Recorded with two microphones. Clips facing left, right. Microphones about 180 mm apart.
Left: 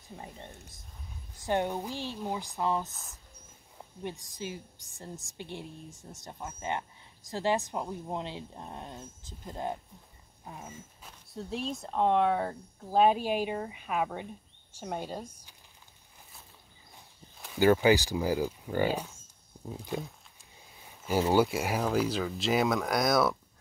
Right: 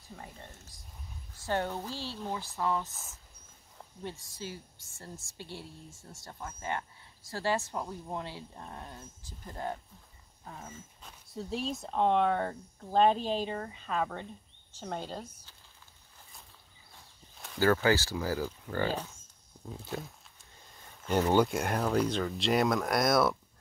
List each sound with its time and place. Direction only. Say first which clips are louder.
0.1 s a woman's voice: left 3 dB; 20° left (ahead or behind)
2.9 s speech: even; centre (ahead or behind)
3.7 s a woman's voice: left 3 dB; 15° left (ahead or behind)
17.6 s speech: left 3 dB; 15° left (ahead or behind); by 23.3 s centre (ahead or behind)